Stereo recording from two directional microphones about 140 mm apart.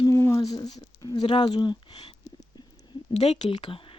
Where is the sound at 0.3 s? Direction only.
30° left (ahead or behind).